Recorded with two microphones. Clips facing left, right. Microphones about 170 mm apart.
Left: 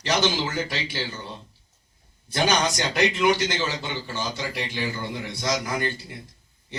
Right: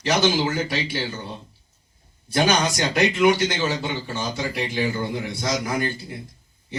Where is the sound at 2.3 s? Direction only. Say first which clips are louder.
Right 2 dB; 50° right (ahead or behind).